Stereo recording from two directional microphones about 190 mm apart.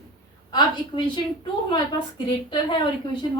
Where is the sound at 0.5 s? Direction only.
25° left (ahead or behind).